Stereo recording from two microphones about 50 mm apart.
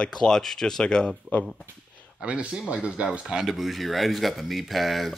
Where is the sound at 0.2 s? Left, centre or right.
Centre.